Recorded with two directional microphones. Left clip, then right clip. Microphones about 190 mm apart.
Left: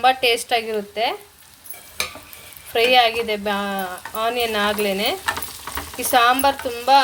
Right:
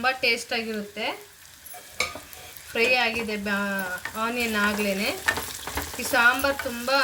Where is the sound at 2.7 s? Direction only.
50° left (ahead or behind).